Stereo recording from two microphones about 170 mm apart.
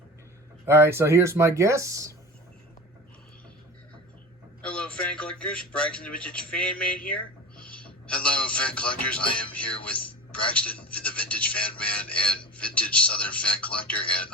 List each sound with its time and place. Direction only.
0.6 s speech: 15° right (ahead or behind)
4.6 s speech: 5° left (ahead or behind)